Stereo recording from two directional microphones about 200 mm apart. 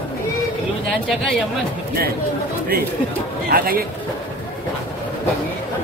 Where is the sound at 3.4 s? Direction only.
50° right (ahead or behind).